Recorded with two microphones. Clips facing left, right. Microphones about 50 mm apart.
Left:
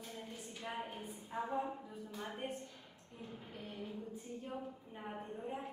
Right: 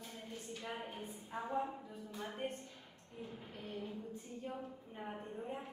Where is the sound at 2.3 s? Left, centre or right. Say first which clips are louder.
Right 1 dB; centre.